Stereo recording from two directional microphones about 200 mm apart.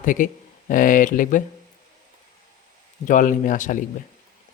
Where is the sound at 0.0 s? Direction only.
40° left (ahead or behind).